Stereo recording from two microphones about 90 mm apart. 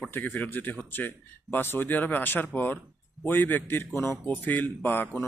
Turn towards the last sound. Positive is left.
turn(degrees=20)  # may be behind; listen again after turning